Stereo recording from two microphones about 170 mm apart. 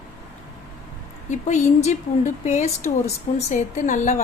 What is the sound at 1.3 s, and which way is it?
A woman's voice, 45° left (ahead or behind).